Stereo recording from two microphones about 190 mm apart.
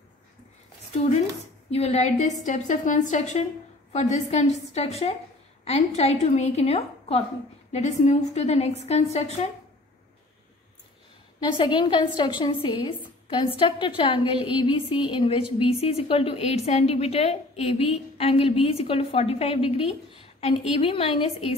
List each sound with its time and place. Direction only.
0.9 s a woman's voice: 35° left (ahead or behind)
11.3 s a woman's voice: 25° left (ahead or behind)